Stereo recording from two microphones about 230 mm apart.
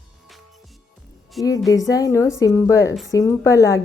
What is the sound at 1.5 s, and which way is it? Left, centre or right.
A woman's voice, centre.